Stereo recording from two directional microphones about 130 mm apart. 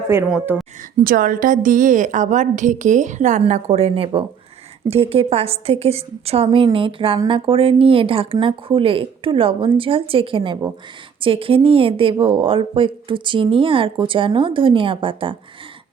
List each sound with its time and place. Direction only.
0.3 s a woman's voice: 15° right (ahead or behind)
1.0 s a woman's voice: 90° right; by 15.4 s 40° right (ahead or behind)